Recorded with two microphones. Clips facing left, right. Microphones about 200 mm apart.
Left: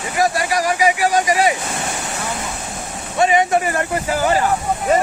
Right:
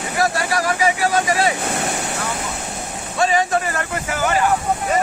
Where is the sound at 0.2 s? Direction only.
15° left (ahead or behind).